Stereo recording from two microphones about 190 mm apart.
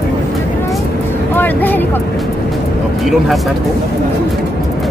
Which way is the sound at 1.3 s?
10° left (ahead or behind).